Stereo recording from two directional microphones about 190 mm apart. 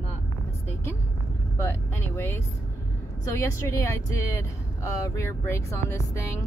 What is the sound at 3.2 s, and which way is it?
Speech, 15° left (ahead or behind).